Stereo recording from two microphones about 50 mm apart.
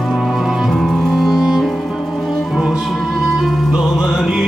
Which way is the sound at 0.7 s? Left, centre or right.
Centre.